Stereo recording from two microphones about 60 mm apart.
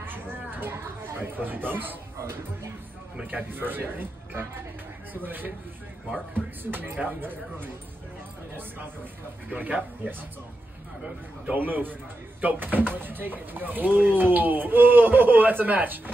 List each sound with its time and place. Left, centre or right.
0.0 s a sound: right
1.2 s speech: right
3.3 s speech: right
11.4 s speech: right